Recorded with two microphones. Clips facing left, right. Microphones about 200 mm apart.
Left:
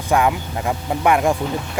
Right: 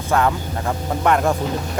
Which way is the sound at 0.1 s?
15° left (ahead or behind).